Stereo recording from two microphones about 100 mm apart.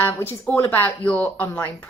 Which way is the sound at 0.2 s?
20° left (ahead or behind).